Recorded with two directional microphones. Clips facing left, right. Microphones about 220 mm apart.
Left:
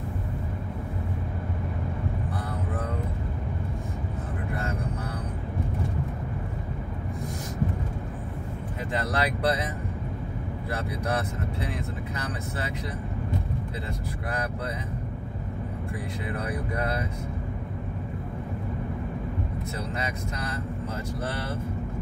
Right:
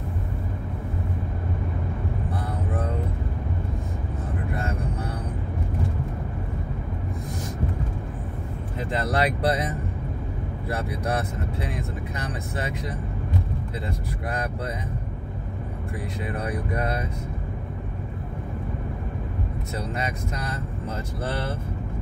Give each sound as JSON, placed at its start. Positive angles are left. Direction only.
{"t": 8.9, "sound": "speech", "side_deg": -30}